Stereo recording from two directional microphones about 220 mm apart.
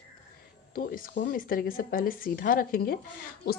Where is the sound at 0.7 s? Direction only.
40° left (ahead or behind).